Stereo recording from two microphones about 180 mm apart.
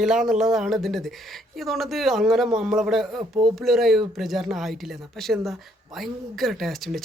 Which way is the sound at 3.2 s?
25° right (ahead or behind).